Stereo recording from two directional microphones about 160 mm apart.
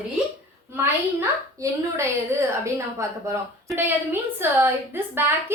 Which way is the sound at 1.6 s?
20° right (ahead or behind).